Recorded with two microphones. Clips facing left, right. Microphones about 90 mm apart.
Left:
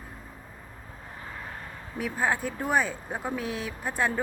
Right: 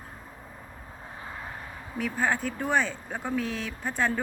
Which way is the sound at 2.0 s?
5° left (ahead or behind).